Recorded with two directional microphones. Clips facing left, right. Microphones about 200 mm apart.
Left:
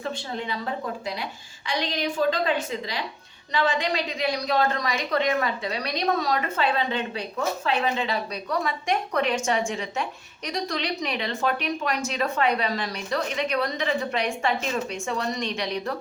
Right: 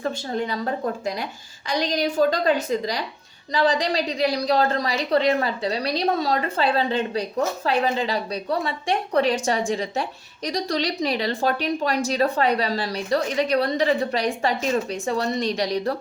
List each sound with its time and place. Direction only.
0.0 s a woman's voice: 45° right (ahead or behind)